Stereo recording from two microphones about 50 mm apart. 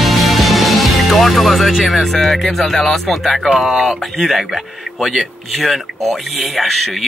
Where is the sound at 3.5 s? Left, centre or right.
Centre.